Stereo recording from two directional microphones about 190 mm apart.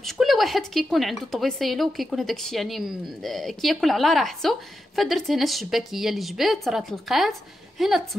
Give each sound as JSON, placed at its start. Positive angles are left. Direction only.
{"t": 0.0, "sound": "a woman's voice", "side_deg": 0}